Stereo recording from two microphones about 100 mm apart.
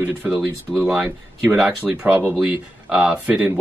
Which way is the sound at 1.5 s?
10° right (ahead or behind).